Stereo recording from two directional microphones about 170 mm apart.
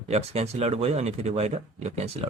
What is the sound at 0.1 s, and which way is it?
Speech, 40° right (ahead or behind).